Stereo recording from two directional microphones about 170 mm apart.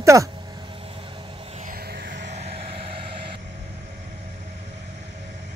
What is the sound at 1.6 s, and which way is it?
Music, 65° right (ahead or behind).